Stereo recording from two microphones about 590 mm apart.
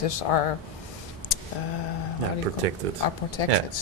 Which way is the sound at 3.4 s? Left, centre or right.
Left.